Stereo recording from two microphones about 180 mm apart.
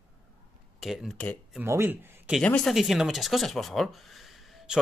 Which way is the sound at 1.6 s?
15° right (ahead or behind).